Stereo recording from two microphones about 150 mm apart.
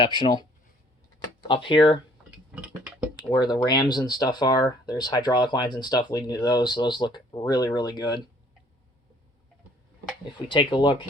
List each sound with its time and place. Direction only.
0.0 s speech: 35° left (ahead or behind)
2.6 s a sound: 5° right (ahead or behind)
3.2 s speech: 30° left (ahead or behind)
10.3 s speech: 35° left (ahead or behind)